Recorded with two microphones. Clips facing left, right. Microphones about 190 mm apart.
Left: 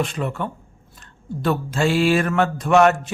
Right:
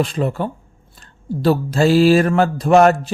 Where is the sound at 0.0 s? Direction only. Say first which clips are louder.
Right 5 dB; 35° right (ahead or behind).